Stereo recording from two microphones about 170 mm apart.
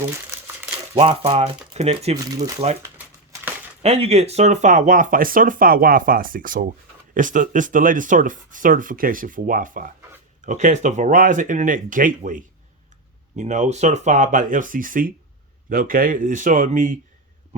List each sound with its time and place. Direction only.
0.9 s speech: 35° right (ahead or behind)
3.8 s speech: 35° right (ahead or behind)